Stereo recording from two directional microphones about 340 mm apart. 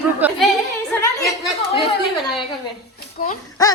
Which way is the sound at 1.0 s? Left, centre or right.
Centre.